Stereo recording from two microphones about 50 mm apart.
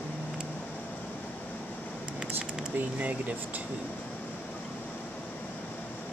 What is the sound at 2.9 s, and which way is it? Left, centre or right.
Speech, right.